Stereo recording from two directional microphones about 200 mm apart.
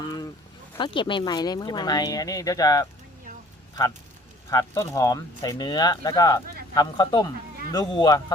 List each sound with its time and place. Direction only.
0.8 s speech: 25° left (ahead or behind)
4.4 s speech: 15° left (ahead or behind)